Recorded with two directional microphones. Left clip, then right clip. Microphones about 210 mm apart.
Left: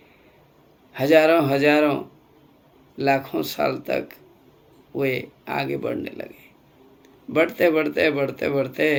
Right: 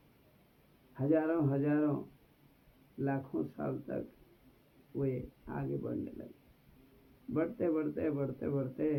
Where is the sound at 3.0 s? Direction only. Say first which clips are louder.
Left 16 dB; 20° left (ahead or behind).